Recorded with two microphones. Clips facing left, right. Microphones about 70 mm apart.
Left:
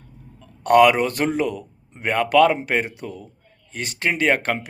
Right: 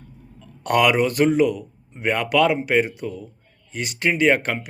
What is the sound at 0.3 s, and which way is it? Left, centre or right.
A man's voice, left.